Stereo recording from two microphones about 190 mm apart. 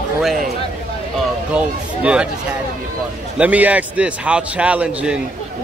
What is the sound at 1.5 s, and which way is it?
Speech, 5° right (ahead or behind).